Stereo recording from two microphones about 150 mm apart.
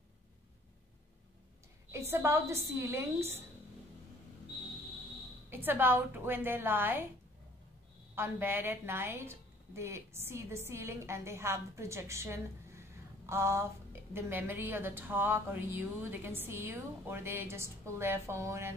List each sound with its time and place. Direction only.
1.9 s a woman's voice: 15° right (ahead or behind)
5.5 s a woman's voice: 15° right (ahead or behind)
8.1 s a woman's voice: 15° right (ahead or behind)